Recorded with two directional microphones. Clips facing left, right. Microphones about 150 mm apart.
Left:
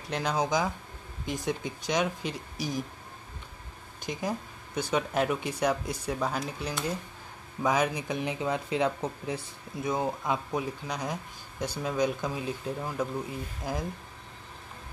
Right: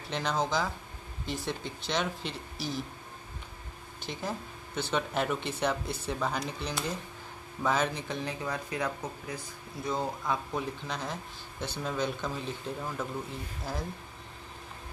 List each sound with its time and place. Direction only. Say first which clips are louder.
0.1 s speech: left 2 dB; 10° left (ahead or behind)
4.0 s speech: left 4 dB; 15° left (ahead or behind)